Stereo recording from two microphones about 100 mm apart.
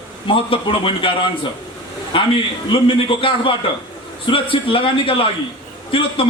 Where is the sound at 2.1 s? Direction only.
60° left (ahead or behind).